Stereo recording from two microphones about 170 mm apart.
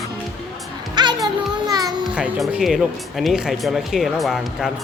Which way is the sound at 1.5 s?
20° right (ahead or behind).